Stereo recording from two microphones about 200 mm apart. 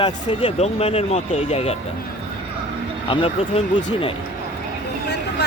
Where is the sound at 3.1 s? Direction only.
25° left (ahead or behind).